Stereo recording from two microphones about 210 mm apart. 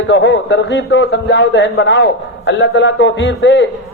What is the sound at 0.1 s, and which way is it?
Speech, 60° left (ahead or behind).